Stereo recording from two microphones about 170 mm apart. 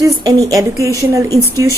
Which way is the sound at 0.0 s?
20° right (ahead or behind).